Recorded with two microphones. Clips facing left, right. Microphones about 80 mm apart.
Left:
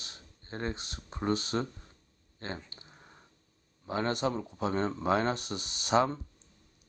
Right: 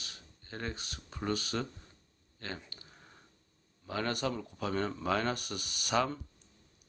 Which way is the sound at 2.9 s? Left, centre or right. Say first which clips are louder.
Left 2 dB; centre.